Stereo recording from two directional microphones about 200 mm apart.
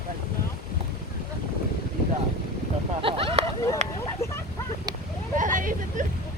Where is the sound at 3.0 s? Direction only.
25° right (ahead or behind).